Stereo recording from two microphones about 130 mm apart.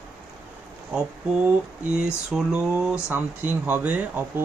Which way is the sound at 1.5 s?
10° right (ahead or behind).